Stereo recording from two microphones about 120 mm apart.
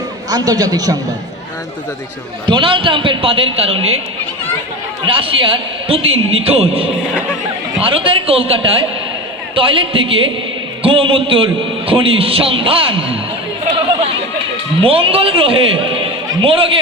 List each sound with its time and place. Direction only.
0.3 s a man's voice: 30° right (ahead or behind)
2.5 s a man's voice: 45° right (ahead or behind)
5.0 s a man's voice: 50° right (ahead or behind)
14.8 s a man's voice: 50° right (ahead or behind)